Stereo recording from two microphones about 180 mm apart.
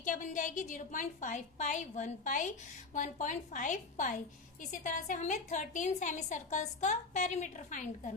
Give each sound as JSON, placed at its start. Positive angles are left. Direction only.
{"t": 0.0, "sound": "a woman's voice", "side_deg": 45}